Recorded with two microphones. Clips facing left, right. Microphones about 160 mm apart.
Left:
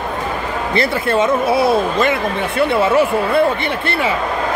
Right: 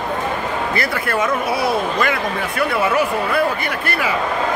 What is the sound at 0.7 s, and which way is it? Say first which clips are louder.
Speech: left 8 dB; 25° left (ahead or behind).